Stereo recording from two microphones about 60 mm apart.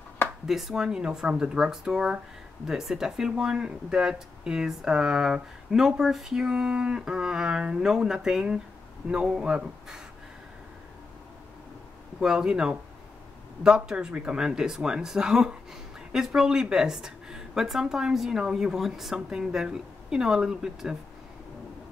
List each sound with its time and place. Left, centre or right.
0.5 s speech: centre
12.2 s speech: centre